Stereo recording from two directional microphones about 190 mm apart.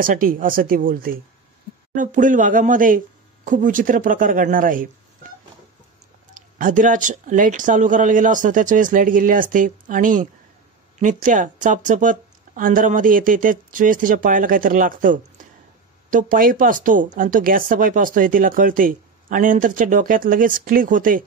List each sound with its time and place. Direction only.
0.0 s speech: 45° right (ahead or behind)
6.3 s speech: 45° right (ahead or behind)